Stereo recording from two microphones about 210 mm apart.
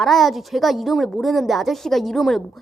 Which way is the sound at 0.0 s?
Centre (ahead or behind).